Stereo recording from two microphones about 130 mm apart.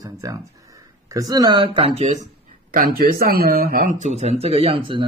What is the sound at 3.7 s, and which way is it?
Speech, 70° right (ahead or behind).